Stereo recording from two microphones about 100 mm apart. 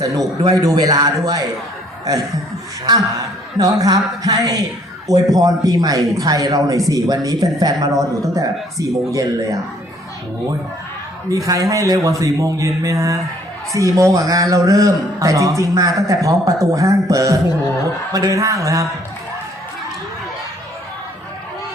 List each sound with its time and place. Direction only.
0.0 s speech: 35° right (ahead or behind)
11.3 s speech: 35° right (ahead or behind)